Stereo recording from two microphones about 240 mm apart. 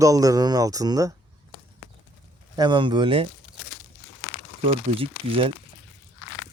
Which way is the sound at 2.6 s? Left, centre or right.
Centre.